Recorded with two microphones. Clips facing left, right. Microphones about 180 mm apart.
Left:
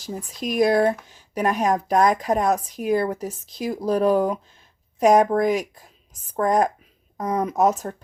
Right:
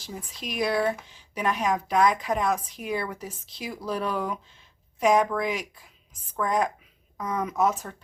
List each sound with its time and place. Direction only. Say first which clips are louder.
0.0 s speech: left 8 dB; 45° left (ahead or behind)